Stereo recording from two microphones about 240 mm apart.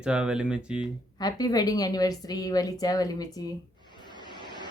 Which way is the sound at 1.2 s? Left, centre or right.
Centre.